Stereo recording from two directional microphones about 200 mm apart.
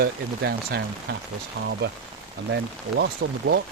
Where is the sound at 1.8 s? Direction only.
60° right (ahead or behind).